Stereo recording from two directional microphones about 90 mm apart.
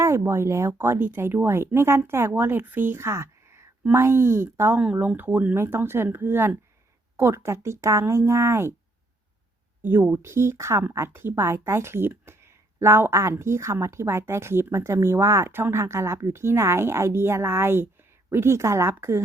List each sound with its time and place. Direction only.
0.0 s a woman's voice: 30° right (ahead or behind)
4.8 s a woman's voice: 15° right (ahead or behind)
9.8 s a woman's voice: 25° right (ahead or behind)